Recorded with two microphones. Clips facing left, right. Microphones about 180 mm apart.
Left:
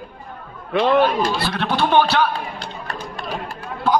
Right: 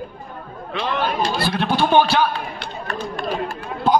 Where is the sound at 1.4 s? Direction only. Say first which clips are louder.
Right 1 dB; 10° right (ahead or behind).